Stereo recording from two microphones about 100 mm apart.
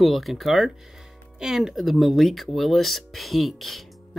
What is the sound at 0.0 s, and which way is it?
Speech, centre (ahead or behind).